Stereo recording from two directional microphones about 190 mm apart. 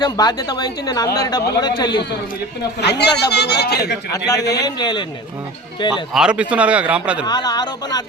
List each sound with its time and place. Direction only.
0.0 s speech: 20° left (ahead or behind)
2.8 s speech: 60° left (ahead or behind)
4.5 s speech: 20° left (ahead or behind)
6.1 s a man's voice: 5° right (ahead or behind)
7.3 s speech: 20° left (ahead or behind)